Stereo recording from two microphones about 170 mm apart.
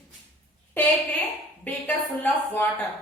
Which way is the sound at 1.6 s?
10° left (ahead or behind).